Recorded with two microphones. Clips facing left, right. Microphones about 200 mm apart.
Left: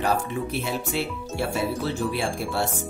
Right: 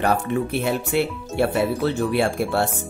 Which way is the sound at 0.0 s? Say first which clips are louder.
Right 4 dB; 60° right (ahead or behind).